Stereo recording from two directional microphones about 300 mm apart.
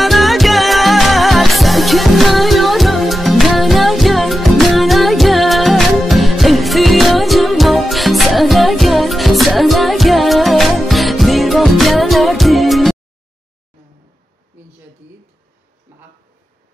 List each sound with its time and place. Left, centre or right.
0.0 s music: centre